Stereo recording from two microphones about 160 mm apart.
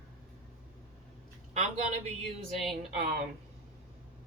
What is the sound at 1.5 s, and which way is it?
Speech, 45° right (ahead or behind).